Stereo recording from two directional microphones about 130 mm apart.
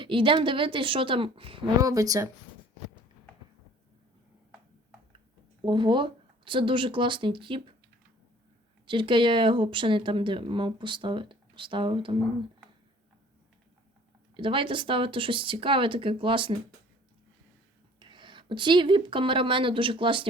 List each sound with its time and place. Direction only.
0.0 s speech: 40° right (ahead or behind)
1.8 s speech: 25° right (ahead or behind)
5.6 s speech: 35° right (ahead or behind)
8.9 s speech: 40° right (ahead or behind)
14.3 s speech: 40° right (ahead or behind)
18.0 s speech: 35° right (ahead or behind)